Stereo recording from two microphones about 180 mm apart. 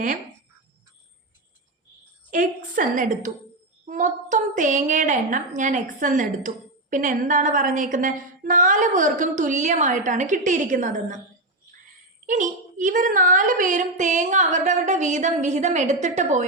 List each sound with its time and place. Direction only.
2.3 s a woman's voice: 45° right (ahead or behind)
12.2 s a woman's voice: 45° right (ahead or behind)